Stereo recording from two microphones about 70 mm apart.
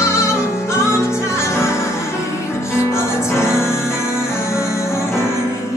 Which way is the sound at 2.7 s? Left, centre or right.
Left.